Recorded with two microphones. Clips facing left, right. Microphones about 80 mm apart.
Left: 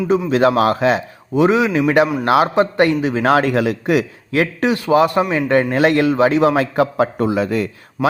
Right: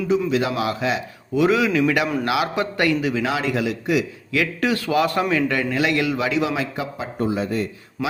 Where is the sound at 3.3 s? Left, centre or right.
Left.